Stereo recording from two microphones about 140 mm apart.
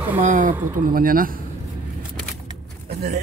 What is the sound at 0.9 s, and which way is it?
Speech, 90° right.